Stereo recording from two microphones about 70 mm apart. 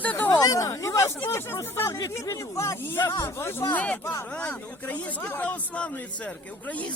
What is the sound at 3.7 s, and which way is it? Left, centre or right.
Speech, left.